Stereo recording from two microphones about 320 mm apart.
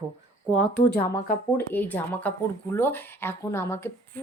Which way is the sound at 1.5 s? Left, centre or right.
Centre.